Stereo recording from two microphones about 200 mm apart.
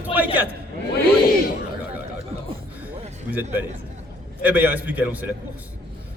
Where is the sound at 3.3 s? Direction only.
10° right (ahead or behind).